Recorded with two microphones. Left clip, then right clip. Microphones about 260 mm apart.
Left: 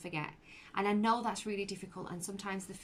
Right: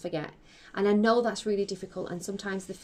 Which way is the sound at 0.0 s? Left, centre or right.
Centre.